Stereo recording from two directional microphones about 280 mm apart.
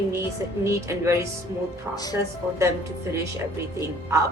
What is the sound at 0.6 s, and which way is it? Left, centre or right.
Speech, centre.